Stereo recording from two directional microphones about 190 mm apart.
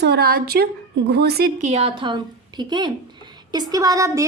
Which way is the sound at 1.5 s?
35° right (ahead or behind).